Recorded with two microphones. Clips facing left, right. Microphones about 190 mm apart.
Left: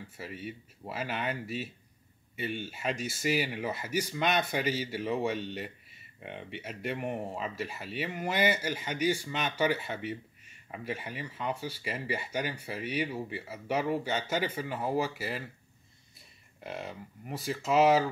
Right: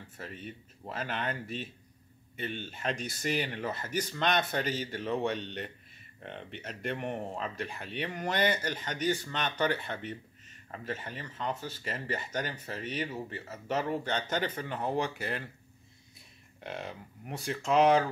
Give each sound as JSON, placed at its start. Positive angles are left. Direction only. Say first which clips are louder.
{"t": 0.2, "sound": "speech", "louder": "left 2 dB", "side_deg": 10}
{"t": 16.6, "sound": "speech", "louder": "even", "side_deg": 0}